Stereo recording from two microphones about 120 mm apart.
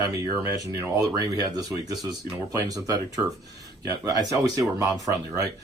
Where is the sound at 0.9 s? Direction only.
30° right (ahead or behind).